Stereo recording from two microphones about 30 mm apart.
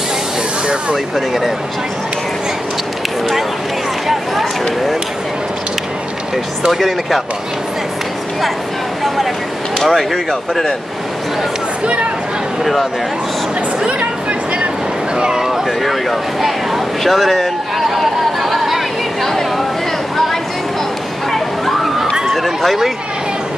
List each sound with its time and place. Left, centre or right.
1.1 s speech: centre
6.7 s speech: centre
9.0 s speech: centre
15.1 s speech: right
15.8 s speech: centre
17.9 s chatter: centre
19.2 s chatter: centre
21.3 s a sound: centre
22.2 s run: centre